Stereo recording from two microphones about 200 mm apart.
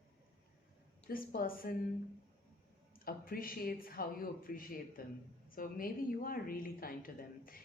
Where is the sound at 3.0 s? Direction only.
45° left (ahead or behind).